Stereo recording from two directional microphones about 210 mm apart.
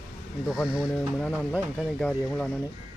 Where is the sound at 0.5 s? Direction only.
5° right (ahead or behind).